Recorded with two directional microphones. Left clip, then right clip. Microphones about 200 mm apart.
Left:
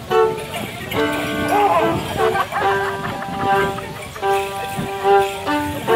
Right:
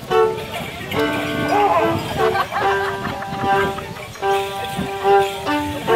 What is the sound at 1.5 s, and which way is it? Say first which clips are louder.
Music: even; 5° left (ahead or behind).